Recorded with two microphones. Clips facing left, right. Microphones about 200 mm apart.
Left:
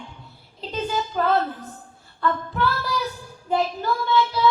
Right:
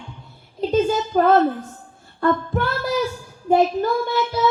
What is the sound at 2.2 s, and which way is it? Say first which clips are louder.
A woman's voice: right 4 dB; 50° right (ahead or behind).